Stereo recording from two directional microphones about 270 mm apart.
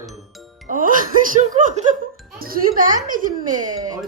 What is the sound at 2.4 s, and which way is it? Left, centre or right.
Speech, right.